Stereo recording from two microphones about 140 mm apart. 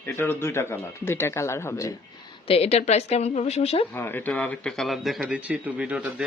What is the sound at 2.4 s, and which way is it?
A woman's voice, 45° left (ahead or behind).